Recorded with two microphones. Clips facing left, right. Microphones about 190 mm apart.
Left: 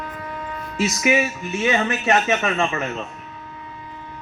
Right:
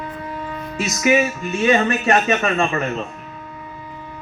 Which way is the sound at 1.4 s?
60° right (ahead or behind).